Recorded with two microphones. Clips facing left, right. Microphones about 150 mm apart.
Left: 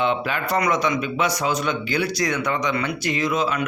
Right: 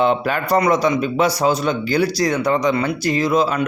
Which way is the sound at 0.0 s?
40° right (ahead or behind).